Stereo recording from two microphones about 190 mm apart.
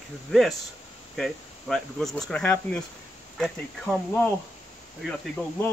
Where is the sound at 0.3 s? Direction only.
Centre (ahead or behind).